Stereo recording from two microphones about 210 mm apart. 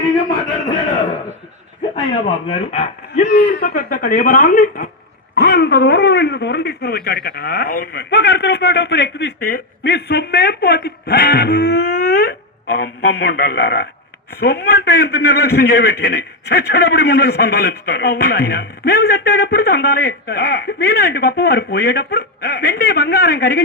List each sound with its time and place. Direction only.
2.5 s speech: 30° left (ahead or behind)
3.2 s a man's voice: 55° left (ahead or behind)